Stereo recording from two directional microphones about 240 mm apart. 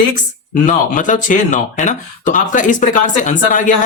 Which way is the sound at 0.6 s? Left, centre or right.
Left.